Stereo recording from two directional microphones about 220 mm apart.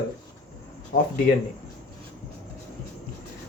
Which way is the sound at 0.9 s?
40° left (ahead or behind).